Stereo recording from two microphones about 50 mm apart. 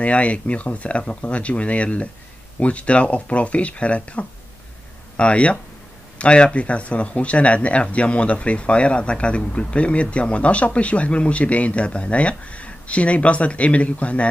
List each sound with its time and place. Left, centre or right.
0.0 s speech: left